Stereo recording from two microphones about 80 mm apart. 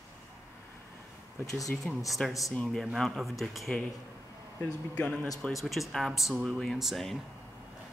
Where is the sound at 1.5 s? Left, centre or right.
Left.